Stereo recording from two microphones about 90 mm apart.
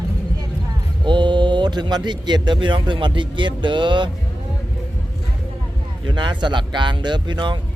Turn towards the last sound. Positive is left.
turn(degrees=-55)  # may be behind; listen again after turning